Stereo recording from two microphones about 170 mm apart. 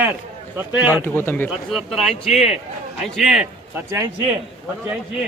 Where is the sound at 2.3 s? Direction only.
40° left (ahead or behind).